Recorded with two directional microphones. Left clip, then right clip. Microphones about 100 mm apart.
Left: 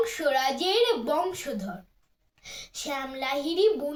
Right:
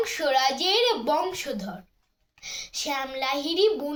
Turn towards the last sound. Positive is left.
turn(degrees=45)  # may be behind; listen again after turning